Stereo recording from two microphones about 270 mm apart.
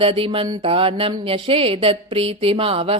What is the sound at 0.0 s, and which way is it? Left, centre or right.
Speech, right.